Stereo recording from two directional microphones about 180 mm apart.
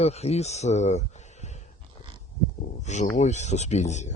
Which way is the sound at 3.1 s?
40° left (ahead or behind).